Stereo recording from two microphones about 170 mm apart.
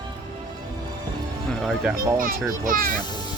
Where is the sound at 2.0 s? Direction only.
55° right (ahead or behind).